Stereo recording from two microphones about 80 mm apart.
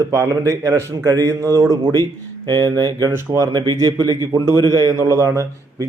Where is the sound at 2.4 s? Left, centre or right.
Right.